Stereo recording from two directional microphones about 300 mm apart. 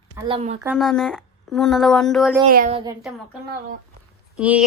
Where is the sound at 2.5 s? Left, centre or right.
Right.